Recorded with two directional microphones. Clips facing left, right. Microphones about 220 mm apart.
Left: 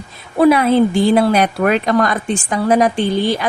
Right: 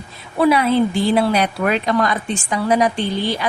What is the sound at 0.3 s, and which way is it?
A man's voice, 50° left (ahead or behind).